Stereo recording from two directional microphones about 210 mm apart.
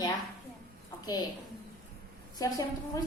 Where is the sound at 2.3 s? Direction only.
15° left (ahead or behind).